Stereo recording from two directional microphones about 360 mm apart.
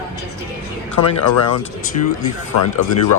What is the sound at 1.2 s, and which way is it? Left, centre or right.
Speech, left.